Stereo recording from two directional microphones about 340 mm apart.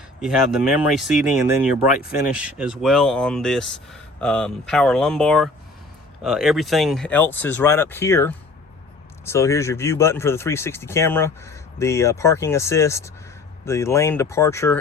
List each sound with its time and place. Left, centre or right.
0.2 s speech: centre